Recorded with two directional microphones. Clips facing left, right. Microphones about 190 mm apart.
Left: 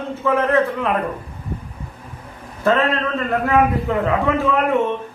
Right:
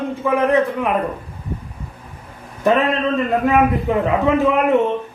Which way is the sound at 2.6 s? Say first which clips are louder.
Right 2 dB; 15° right (ahead or behind).